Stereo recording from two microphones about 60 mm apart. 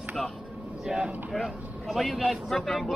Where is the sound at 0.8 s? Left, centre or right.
Centre.